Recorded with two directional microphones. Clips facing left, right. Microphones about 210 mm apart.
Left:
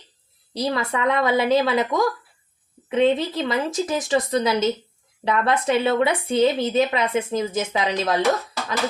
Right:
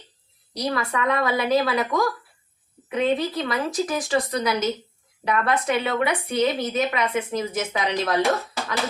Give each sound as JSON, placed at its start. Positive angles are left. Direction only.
{"t": 0.5, "sound": "a woman's voice", "side_deg": 25}